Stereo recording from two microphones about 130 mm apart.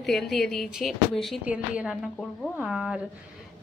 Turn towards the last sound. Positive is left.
turn(degrees=-5)  # may be behind; listen again after turning